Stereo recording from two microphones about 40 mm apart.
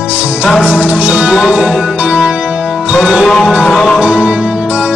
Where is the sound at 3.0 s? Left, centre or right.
Centre.